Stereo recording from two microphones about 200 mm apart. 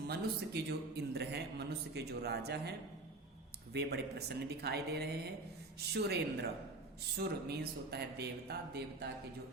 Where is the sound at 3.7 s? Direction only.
55° right (ahead or behind).